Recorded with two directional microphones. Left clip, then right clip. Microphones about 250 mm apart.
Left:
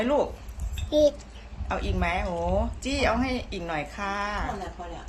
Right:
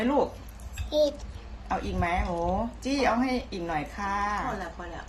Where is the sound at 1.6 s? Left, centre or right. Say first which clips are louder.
Even; centre.